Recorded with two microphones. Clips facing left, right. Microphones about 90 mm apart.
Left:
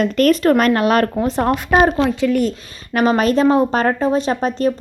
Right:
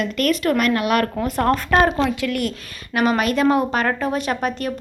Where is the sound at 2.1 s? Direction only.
80° right.